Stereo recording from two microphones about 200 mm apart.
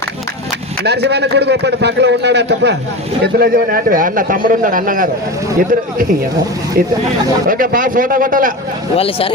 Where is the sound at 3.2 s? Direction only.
50° right (ahead or behind).